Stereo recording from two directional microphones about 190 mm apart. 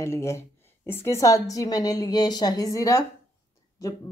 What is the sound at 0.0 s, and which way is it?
A woman's voice, 15° left (ahead or behind).